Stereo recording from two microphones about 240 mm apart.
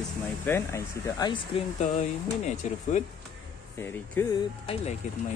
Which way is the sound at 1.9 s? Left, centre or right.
Left.